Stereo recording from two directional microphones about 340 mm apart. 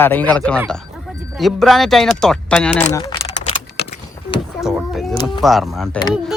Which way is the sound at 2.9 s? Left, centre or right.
Centre.